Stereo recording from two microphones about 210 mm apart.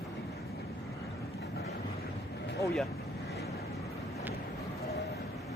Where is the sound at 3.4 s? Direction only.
15° left (ahead or behind).